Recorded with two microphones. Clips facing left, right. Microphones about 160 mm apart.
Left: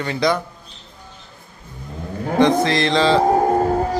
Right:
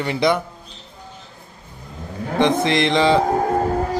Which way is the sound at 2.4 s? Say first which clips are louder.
Left 1 dB; 20° right (ahead or behind).